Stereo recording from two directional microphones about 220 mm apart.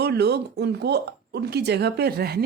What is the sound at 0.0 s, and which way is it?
Speech, 50° right (ahead or behind).